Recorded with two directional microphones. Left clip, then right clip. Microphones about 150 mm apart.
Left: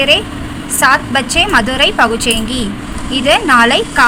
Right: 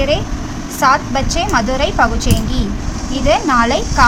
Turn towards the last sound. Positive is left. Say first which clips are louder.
# left 5 dB
turn(degrees=20)  # may be behind; listen again after turning